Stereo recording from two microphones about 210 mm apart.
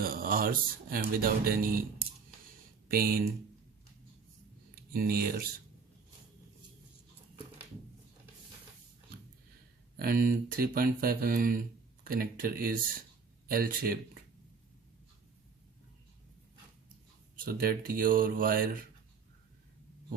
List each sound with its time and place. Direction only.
0.0 s speech: 45° right (ahead or behind)
2.9 s speech: 45° right (ahead or behind)
4.7 s speech: 45° right (ahead or behind)
10.0 s speech: 45° right (ahead or behind)
17.3 s speech: 45° right (ahead or behind)